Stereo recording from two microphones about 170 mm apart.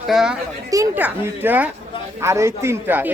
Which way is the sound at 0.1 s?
Centre (ahead or behind).